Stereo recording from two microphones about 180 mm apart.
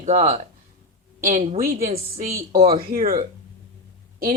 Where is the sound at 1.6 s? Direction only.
55° right (ahead or behind).